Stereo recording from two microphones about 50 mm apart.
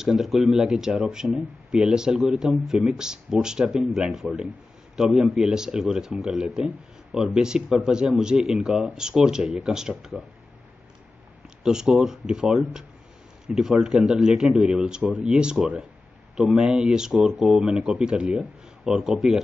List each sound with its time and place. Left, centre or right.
0.0 s speech: centre
11.6 s speech: centre
18.9 s speech: centre